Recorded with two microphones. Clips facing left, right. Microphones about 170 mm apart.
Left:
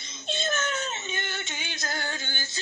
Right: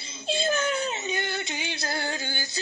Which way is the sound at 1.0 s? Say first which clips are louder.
Right 5 dB; 35° right (ahead or behind).